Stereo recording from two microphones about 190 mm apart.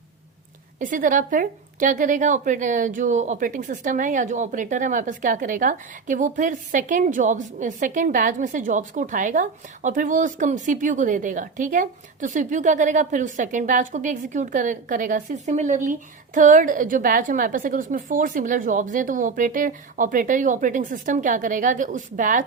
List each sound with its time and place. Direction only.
0.8 s a woman's voice: 45° right (ahead or behind)